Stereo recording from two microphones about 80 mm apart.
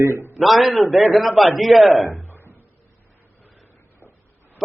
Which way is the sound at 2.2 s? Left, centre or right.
Left.